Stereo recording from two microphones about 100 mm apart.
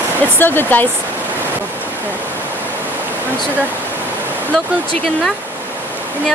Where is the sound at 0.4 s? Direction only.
20° left (ahead or behind).